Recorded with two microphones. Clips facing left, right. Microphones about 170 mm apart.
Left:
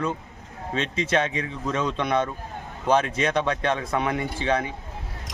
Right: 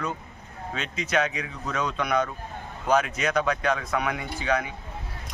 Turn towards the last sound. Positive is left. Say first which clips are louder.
# left 2 dB
turn(degrees=30)  # may be behind; listen again after turning